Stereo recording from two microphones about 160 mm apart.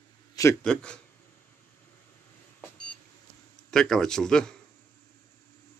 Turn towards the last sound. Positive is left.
turn(degrees=5)  # may be behind; listen again after turning